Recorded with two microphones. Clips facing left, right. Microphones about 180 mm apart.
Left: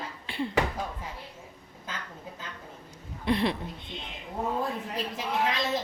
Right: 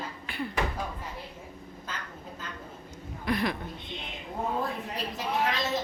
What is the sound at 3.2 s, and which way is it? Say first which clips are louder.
Speech: left 2 dB; 30° left (ahead or behind).